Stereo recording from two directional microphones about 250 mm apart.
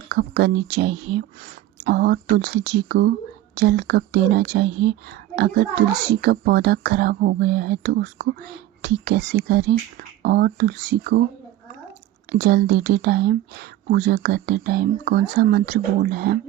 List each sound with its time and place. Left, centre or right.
0.1 s a woman's voice: right
12.3 s speech: right